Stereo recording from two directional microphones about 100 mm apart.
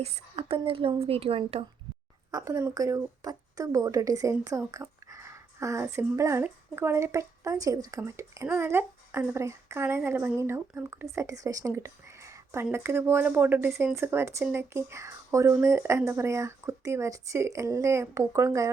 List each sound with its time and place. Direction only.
0.0 s a woman's voice: 80° right
2.3 s a woman's voice: 35° right (ahead or behind)